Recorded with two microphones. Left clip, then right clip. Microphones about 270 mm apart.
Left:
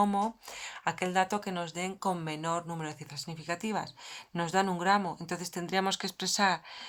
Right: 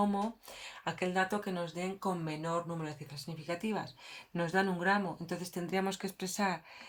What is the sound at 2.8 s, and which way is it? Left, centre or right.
Speech, left.